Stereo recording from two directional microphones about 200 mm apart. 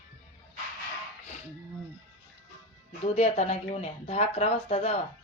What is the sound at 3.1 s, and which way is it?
Speech, 30° left (ahead or behind).